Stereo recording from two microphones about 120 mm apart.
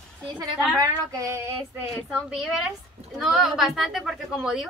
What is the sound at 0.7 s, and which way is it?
A woman's voice, 25° right (ahead or behind).